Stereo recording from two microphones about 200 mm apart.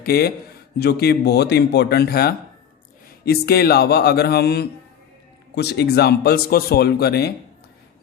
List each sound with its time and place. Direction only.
0.0 s speech: 50° left (ahead or behind)